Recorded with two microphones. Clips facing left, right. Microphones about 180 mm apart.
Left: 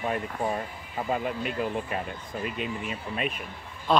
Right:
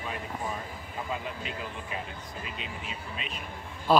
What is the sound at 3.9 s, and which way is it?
Speech, 5° right (ahead or behind).